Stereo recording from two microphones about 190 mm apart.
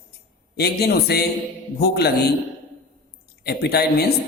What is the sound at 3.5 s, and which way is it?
Speech, 55° left (ahead or behind).